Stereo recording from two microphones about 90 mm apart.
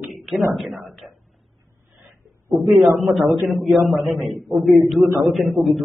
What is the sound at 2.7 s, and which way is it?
A man's voice, centre (ahead or behind).